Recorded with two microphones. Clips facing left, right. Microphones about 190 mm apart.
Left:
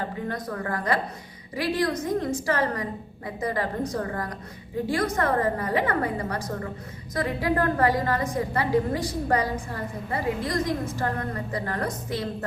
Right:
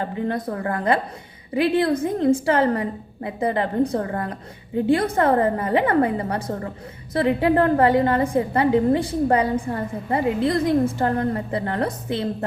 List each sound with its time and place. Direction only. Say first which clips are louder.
0.3 s a woman's voice: right 5 dB; 30° right (ahead or behind)